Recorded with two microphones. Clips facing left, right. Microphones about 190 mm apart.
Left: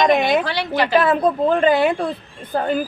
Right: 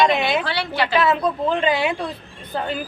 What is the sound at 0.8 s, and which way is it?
A woman's voice, 45° left (ahead or behind).